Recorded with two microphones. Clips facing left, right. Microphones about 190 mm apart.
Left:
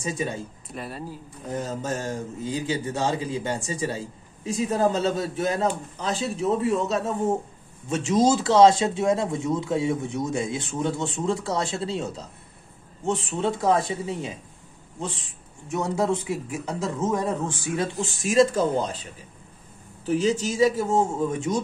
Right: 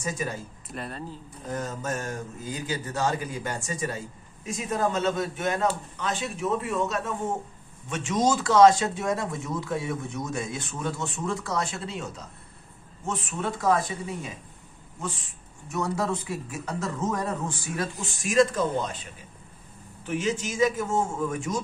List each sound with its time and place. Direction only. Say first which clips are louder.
0.0 s speech: left 3 dB; 25° left (ahead or behind)
0.7 s speech: even; 5° left (ahead or behind)
1.5 s a man's voice: left 2 dB; 30° left (ahead or behind)
15.7 s a man's voice: left 4 dB; 25° left (ahead or behind)
20.1 s a man's voice: left 5 dB; 35° left (ahead or behind)